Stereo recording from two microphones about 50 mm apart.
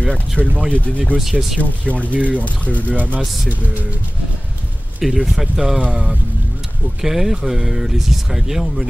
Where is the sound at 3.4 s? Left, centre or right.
Right.